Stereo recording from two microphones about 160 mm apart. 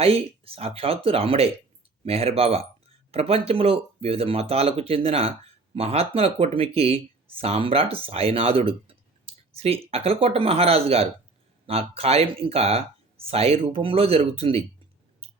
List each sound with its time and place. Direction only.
0.0 s speech: 35° right (ahead or behind)